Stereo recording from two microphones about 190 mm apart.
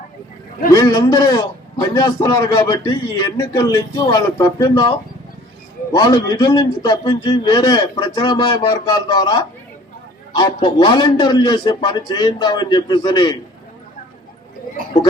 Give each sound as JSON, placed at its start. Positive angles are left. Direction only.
{"t": 0.7, "sound": "a man's voice", "side_deg": 20}